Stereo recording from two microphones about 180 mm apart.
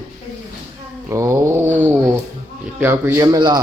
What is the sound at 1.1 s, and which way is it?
Speech, 15° right (ahead or behind).